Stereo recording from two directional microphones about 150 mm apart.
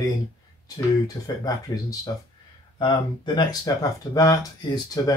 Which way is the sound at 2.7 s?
30° left (ahead or behind).